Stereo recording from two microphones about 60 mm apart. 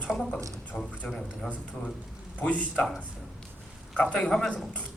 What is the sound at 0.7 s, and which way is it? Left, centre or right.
Speech, left.